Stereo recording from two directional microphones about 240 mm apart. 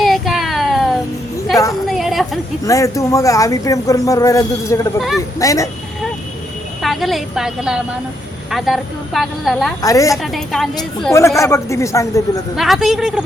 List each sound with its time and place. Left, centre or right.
0.0 s a sound: centre
2.6 s speech: centre
6.8 s a woman's voice: centre
9.8 s speech: centre
10.3 s a woman's voice: centre
11.0 s speech: centre
12.5 s a woman's voice: centre